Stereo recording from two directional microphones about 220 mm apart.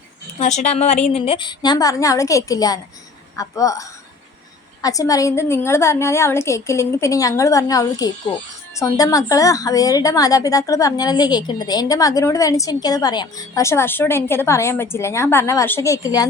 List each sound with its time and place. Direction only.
0.3 s a woman's voice: 30° left (ahead or behind); by 16.2 s 15° left (ahead or behind)